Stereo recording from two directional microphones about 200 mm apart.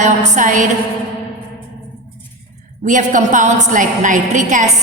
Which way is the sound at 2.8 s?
40° right (ahead or behind).